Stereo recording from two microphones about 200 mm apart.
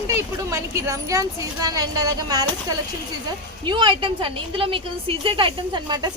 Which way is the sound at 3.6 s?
25° right (ahead or behind).